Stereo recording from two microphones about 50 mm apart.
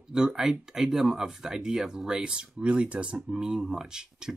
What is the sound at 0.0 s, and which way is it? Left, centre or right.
Speech, centre.